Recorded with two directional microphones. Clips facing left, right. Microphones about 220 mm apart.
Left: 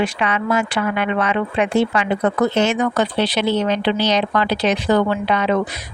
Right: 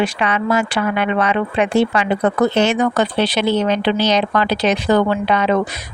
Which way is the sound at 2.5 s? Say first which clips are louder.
Right 2 dB; 70° right (ahead or behind).